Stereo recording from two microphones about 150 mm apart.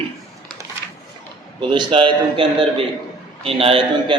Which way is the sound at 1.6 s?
35° right (ahead or behind).